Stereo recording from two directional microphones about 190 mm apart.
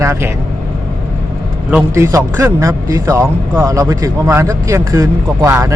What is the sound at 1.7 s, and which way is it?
A man's voice, 15° right (ahead or behind).